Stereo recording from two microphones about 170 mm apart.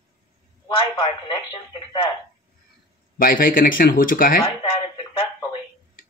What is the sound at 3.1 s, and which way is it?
Speech, 60° left (ahead or behind).